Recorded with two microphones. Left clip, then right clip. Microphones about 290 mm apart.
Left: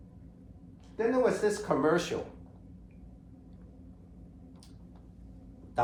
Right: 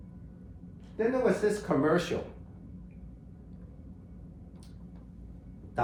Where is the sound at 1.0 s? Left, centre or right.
Centre.